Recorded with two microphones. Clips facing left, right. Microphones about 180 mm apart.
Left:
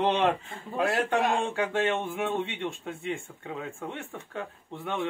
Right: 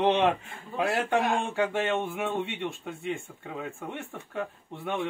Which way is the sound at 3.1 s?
Centre (ahead or behind).